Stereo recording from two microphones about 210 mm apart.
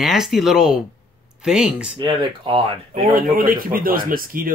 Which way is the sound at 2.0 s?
20° right (ahead or behind).